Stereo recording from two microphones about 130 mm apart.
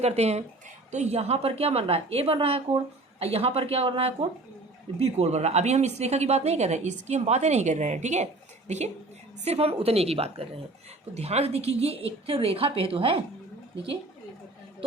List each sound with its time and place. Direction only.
0.0 s a woman's voice: 55° right (ahead or behind)